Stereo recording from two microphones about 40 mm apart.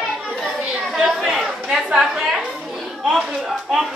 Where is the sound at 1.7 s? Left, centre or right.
Centre.